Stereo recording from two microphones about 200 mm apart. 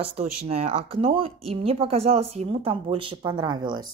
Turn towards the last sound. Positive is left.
turn(degrees=-20)  # may be behind; listen again after turning